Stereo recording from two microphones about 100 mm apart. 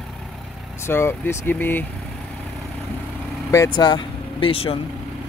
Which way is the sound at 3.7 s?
50° left (ahead or behind).